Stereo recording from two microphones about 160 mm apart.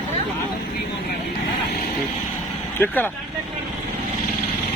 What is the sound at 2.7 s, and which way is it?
Speech, 10° left (ahead or behind).